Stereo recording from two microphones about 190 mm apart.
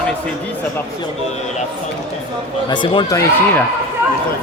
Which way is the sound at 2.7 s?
25° left (ahead or behind).